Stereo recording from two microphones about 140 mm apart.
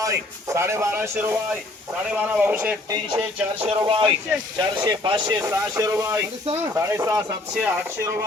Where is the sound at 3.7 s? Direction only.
40° right (ahead or behind).